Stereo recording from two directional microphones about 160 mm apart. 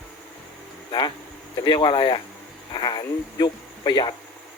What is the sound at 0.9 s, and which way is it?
Speech, 30° left (ahead or behind).